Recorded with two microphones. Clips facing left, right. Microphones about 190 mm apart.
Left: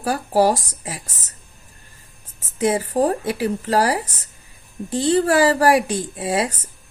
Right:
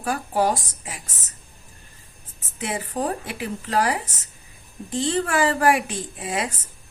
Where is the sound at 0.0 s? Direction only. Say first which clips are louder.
Left 5 dB; 35° left (ahead or behind).